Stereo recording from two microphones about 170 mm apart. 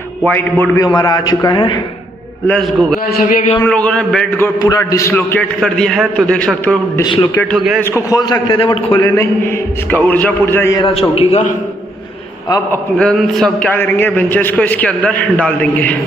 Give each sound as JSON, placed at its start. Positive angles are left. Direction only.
{"t": 0.2, "sound": "a man's voice", "side_deg": 10}
{"t": 0.7, "sound": "a man's voice", "side_deg": 25}
{"t": 2.4, "sound": "a man's voice", "side_deg": 10}
{"t": 3.2, "sound": "a man's voice", "side_deg": 55}
{"t": 3.6, "sound": "a man's voice", "side_deg": 10}
{"t": 4.6, "sound": "a man's voice", "side_deg": 20}
{"t": 7.9, "sound": "a man's voice", "side_deg": 20}
{"t": 9.1, "sound": "a man's voice", "side_deg": 15}
{"t": 10.9, "sound": "a man's voice", "side_deg": 35}
{"t": 12.9, "sound": "a man's voice", "side_deg": 5}